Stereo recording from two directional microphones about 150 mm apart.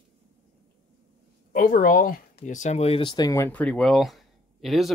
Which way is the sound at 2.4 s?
50° left (ahead or behind).